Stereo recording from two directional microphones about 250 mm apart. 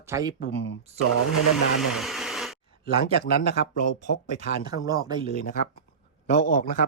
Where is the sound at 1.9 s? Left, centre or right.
Centre.